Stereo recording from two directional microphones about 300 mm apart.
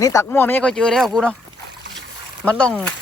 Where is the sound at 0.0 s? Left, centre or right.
Centre.